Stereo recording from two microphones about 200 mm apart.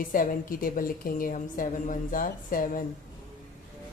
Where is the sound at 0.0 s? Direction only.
45° left (ahead or behind).